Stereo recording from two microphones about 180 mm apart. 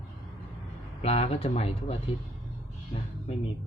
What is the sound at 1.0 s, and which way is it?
Speech, 35° left (ahead or behind).